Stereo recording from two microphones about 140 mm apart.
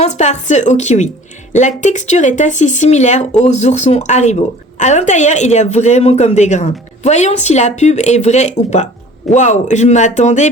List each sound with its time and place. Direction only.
0.0 s a woman's voice: 55° left (ahead or behind)